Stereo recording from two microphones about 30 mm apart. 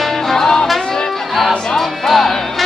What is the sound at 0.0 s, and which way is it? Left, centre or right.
Music, centre.